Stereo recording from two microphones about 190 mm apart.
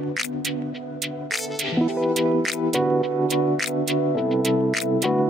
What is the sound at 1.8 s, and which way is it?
Music, centre (ahead or behind).